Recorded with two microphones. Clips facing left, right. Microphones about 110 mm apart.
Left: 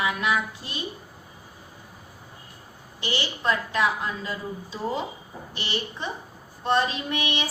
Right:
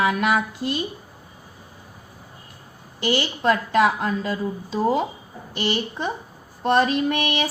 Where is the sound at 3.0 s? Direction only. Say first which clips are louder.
Right 7 dB; 55° right (ahead or behind).